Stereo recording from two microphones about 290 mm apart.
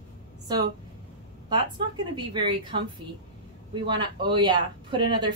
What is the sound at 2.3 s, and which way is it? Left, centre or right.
Speech, centre.